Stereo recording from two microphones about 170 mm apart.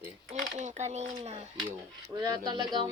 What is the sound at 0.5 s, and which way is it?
Speech, 45° right (ahead or behind).